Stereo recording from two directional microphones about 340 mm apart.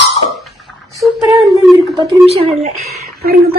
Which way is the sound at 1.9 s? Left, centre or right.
Centre.